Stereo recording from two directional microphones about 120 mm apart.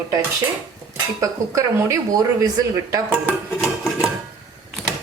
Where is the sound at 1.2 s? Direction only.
25° right (ahead or behind).